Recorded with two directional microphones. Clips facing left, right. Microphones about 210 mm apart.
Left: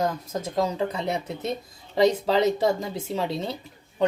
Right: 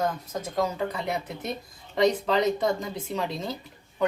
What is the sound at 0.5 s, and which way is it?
Speech, 25° left (ahead or behind).